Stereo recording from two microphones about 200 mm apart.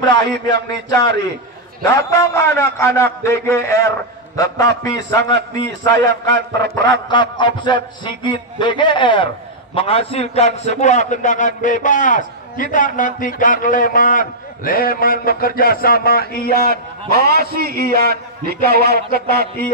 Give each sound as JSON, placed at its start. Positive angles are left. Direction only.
{"t": 0.0, "sound": "a man's voice", "side_deg": 20}
{"t": 1.8, "sound": "a man's voice", "side_deg": 15}
{"t": 16.5, "sound": "a man's voice", "side_deg": -50}